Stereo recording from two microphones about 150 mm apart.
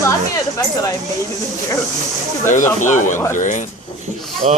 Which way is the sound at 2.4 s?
60° left (ahead or behind).